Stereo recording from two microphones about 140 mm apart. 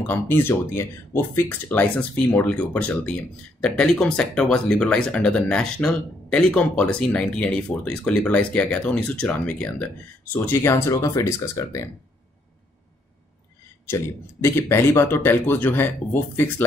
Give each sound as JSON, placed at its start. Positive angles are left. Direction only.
{"t": 0.0, "sound": "speech", "side_deg": 15}
{"t": 13.8, "sound": "speech", "side_deg": 15}